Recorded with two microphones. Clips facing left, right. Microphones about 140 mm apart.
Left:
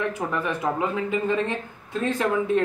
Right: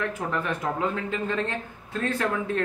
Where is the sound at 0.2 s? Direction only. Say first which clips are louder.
Left 2 dB; 15° left (ahead or behind).